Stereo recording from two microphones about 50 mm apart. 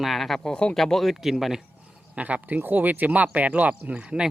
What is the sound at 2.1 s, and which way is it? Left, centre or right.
Speech, right.